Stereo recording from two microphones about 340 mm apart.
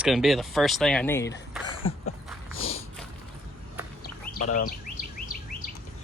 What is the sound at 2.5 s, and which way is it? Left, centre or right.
Snort, left.